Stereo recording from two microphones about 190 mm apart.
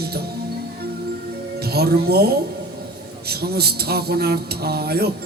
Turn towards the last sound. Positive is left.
turn(degrees=-55)  # may be behind; listen again after turning